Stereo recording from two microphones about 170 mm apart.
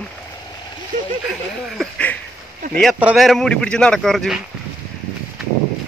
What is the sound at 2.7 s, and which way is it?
Speech, centre (ahead or behind).